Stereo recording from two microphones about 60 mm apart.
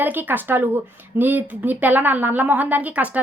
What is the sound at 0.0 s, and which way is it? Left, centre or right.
A woman's voice, right.